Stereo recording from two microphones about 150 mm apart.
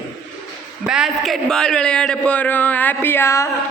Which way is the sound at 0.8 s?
5° right (ahead or behind).